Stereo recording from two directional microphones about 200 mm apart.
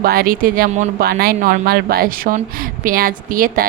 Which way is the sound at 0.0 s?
50° right (ahead or behind).